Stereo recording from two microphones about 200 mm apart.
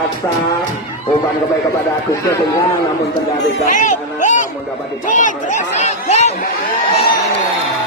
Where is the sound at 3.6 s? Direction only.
40° left (ahead or behind).